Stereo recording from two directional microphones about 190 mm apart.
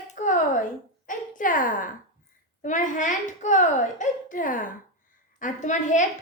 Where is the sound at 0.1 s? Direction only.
45° left (ahead or behind).